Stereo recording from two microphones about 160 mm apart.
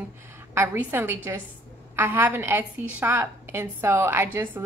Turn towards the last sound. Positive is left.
turn(degrees=-15)  # may be behind; listen again after turning